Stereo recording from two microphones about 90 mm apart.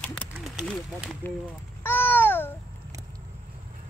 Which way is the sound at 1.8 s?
25° left (ahead or behind).